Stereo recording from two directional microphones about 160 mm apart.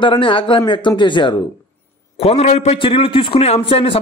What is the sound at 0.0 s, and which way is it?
Speech, 30° left (ahead or behind).